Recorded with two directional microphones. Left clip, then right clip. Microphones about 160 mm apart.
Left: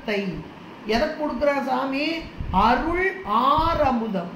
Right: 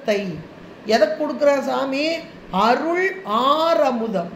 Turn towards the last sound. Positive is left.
turn(degrees=-75)  # may be behind; listen again after turning